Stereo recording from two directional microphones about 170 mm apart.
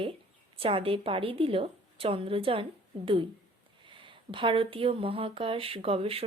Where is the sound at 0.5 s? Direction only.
35° right (ahead or behind).